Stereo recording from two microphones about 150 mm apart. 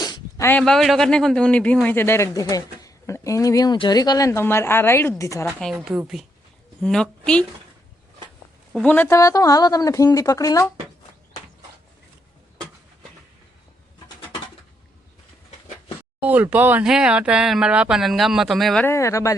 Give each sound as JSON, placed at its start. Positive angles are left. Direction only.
{"t": 0.0, "sound": "a sound", "side_deg": 25}
{"t": 0.5, "sound": "a man's voice", "side_deg": 5}
{"t": 5.7, "sound": "speech", "side_deg": -10}
{"t": 6.8, "sound": "speech", "side_deg": 5}
{"t": 8.7, "sound": "speech", "side_deg": 10}
{"t": 16.2, "sound": "speech", "side_deg": -10}
{"t": 18.9, "sound": "speech", "side_deg": 20}